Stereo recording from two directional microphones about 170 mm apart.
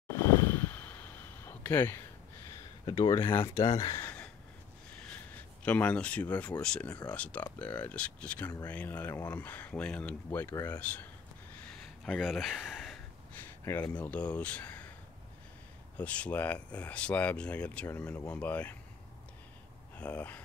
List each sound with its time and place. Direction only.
0.1 s a sound: 15° left (ahead or behind)
2.8 s speech: 25° left (ahead or behind)
3.2 s speech: 15° left (ahead or behind)
3.6 s speech: 35° left (ahead or behind)
3.9 s a sound: 10° left (ahead or behind)
6.6 s speech: 5° left (ahead or behind)
11.6 s a sound: 5° left (ahead or behind)
13.7 s speech: 15° left (ahead or behind)
16.0 s speech: 10° left (ahead or behind)
20.0 s speech: 10° left (ahead or behind)